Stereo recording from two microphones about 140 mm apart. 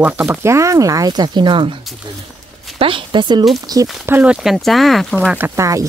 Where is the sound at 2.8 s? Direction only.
40° right (ahead or behind).